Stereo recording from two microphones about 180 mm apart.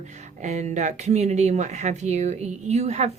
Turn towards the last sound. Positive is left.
turn(degrees=-40)  # may be behind; listen again after turning